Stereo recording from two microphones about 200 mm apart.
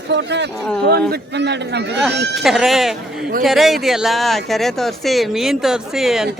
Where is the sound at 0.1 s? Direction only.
60° right (ahead or behind).